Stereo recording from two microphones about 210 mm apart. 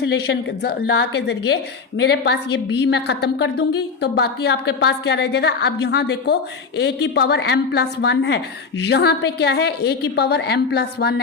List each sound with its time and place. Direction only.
0.0 s a woman's voice: 50° left (ahead or behind)